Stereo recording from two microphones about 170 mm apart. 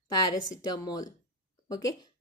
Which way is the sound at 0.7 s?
20° left (ahead or behind).